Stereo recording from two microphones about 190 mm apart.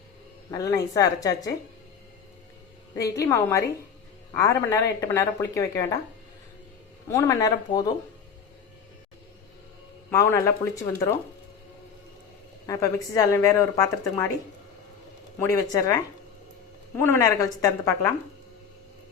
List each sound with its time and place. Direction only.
0.5 s speech: 20° left (ahead or behind)
3.0 s speech: 15° left (ahead or behind)
7.1 s speech: 15° left (ahead or behind)
10.1 s speech: 15° left (ahead or behind)
12.6 s speech: 15° left (ahead or behind)
15.4 s speech: 15° left (ahead or behind)